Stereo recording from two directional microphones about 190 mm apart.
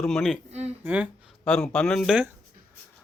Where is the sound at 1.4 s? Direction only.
5° left (ahead or behind).